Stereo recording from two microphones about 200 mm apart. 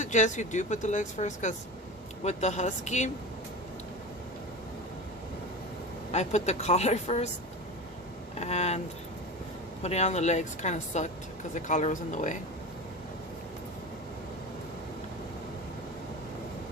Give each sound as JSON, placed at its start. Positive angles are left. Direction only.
{"t": 0.0, "sound": "speech", "side_deg": 40}
{"t": 6.1, "sound": "speech", "side_deg": 35}
{"t": 8.4, "sound": "speech", "side_deg": 35}
{"t": 9.8, "sound": "speech", "side_deg": 35}